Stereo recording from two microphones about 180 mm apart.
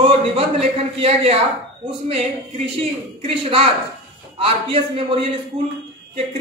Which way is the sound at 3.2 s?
30° right (ahead or behind).